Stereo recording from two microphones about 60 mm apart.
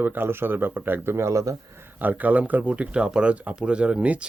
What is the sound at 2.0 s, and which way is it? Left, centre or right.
Speech, right.